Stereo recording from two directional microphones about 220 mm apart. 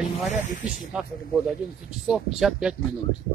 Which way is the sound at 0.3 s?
40° left (ahead or behind).